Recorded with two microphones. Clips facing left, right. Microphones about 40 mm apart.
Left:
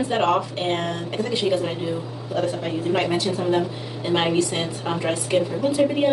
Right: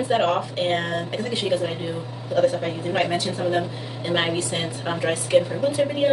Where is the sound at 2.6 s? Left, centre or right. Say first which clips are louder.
Left 1 dB; centre.